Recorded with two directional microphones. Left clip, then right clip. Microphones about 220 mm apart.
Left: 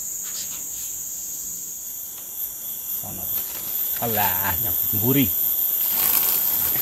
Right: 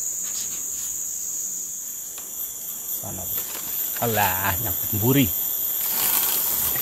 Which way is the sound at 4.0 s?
45° right (ahead or behind).